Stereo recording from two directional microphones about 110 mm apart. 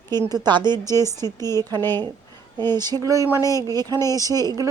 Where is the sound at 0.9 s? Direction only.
25° left (ahead or behind).